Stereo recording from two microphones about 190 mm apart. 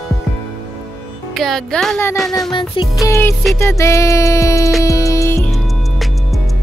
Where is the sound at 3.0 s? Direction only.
15° left (ahead or behind).